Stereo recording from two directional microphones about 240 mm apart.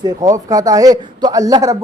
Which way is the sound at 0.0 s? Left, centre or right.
Centre.